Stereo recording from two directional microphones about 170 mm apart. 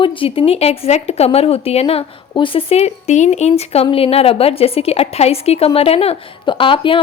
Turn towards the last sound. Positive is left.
turn(degrees=30)  # may be behind; listen again after turning